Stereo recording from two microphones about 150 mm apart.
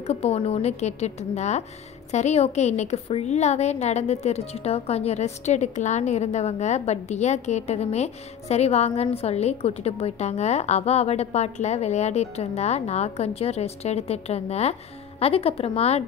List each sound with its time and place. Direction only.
0.0 s a woman's voice: 45° left (ahead or behind)